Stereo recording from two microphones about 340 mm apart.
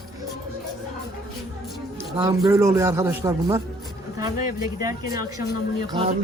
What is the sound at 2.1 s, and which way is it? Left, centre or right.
A man's voice, centre.